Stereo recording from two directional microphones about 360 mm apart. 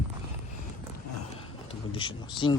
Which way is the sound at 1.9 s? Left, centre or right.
Centre.